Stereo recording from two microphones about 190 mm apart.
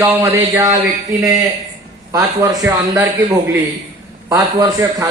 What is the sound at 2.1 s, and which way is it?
Speech, 20° right (ahead or behind).